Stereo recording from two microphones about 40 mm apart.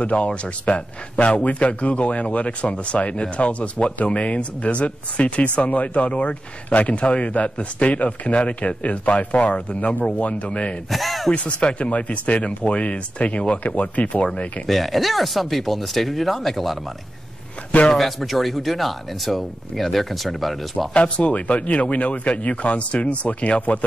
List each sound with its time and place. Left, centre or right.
0.0 s a man's voice: left
10.9 s speech: centre
11.3 s a man's voice: left
14.7 s speech: centre
17.9 s speech: centre
20.9 s a man's voice: left